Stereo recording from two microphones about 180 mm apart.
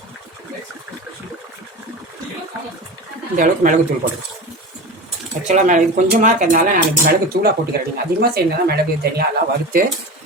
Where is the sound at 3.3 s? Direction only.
45° right (ahead or behind).